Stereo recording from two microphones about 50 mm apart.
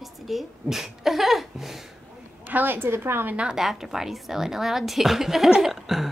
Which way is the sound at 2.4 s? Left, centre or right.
Right.